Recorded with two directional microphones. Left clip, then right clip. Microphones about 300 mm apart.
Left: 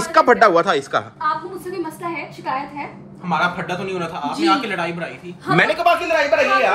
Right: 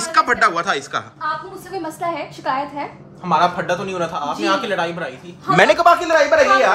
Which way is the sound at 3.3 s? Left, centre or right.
Centre.